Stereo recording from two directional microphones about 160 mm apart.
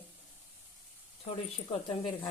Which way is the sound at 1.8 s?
30° left (ahead or behind).